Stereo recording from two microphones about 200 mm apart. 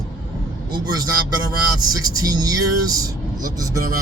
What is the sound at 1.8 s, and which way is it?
Speech, 20° right (ahead or behind).